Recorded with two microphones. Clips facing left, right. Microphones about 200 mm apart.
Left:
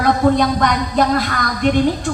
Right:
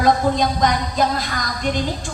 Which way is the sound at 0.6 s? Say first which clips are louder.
Left 2 dB; 60° left (ahead or behind).